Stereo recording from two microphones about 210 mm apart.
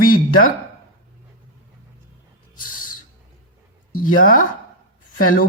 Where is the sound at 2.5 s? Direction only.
40° left (ahead or behind).